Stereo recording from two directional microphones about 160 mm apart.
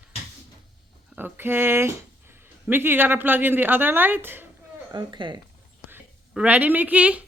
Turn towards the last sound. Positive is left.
turn(degrees=-10)  # may be behind; listen again after turning